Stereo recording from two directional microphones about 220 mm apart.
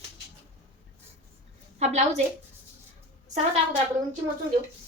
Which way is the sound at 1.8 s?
30° right (ahead or behind).